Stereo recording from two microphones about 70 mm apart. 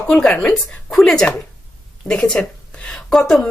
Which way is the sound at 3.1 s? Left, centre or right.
Centre.